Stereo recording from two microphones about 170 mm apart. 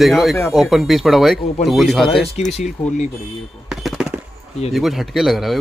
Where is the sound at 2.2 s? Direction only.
40° left (ahead or behind).